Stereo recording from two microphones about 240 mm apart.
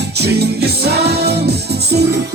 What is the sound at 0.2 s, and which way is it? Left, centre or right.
Music, right.